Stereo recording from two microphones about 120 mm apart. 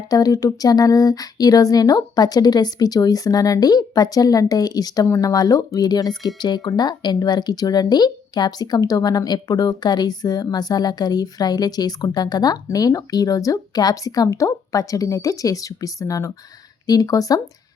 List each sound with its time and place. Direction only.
0.1 s speech: 30° left (ahead or behind)